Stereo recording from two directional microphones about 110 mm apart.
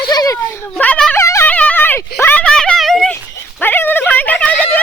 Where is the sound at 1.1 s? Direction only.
25° left (ahead or behind).